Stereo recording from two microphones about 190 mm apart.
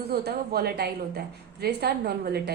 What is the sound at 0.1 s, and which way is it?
A woman's voice, 55° right (ahead or behind).